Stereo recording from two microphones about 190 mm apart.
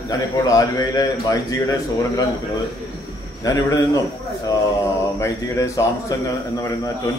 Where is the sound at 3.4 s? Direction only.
20° left (ahead or behind).